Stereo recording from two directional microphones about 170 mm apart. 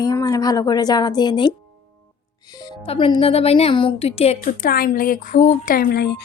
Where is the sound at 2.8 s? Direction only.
30° left (ahead or behind).